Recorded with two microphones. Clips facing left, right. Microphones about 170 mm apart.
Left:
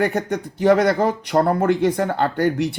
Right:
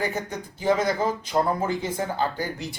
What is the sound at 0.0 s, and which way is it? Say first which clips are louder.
Speech: left 8 dB; 65° left (ahead or behind).